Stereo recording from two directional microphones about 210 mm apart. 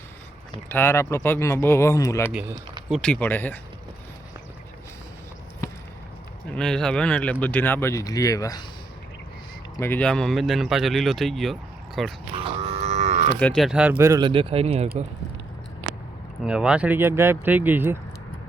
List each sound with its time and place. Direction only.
0.7 s speech: 10° left (ahead or behind)
6.6 s speech: 5° left (ahead or behind)
9.7 s speech: 10° left (ahead or behind)
12.4 s livestock: 25° right (ahead or behind)
13.4 s speech: centre (ahead or behind)
14.0 s speech: 20° right (ahead or behind)
16.4 s speech: 5° right (ahead or behind)